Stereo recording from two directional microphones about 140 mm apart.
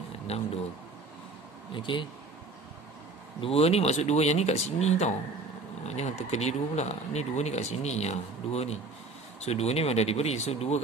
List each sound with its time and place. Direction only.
0.3 s speech: 45° left (ahead or behind)
1.7 s speech: 35° left (ahead or behind)
3.3 s speech: 45° left (ahead or behind)